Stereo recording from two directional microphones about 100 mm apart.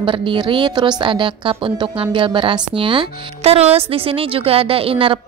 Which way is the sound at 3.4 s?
90° right.